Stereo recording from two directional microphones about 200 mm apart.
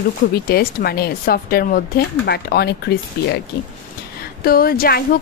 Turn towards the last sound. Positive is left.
turn(degrees=45)  # may be behind; listen again after turning